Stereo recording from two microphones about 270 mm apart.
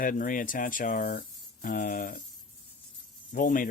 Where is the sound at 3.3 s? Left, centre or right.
Left.